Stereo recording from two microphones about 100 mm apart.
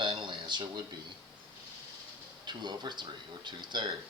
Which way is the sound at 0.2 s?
50° right (ahead or behind).